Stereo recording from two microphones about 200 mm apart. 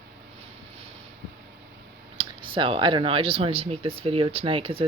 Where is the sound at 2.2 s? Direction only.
25° right (ahead or behind).